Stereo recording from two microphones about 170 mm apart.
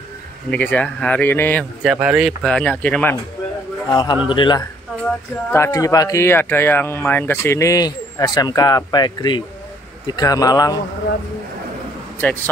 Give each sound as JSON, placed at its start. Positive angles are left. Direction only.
{"t": 0.5, "sound": "speech", "side_deg": 10}
{"t": 1.8, "sound": "speech", "side_deg": -5}
{"t": 3.9, "sound": "speech", "side_deg": 25}
{"t": 12.2, "sound": "speech", "side_deg": 10}